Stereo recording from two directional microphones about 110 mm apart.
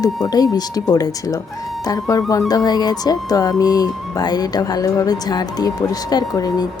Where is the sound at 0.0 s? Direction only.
35° left (ahead or behind).